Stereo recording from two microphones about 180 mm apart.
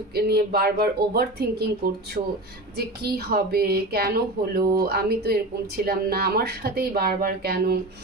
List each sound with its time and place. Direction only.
0.1 s speech: 60° right (ahead or behind)
3.0 s speech: 60° right (ahead or behind)